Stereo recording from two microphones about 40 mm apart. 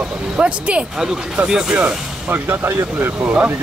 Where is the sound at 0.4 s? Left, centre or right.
Right.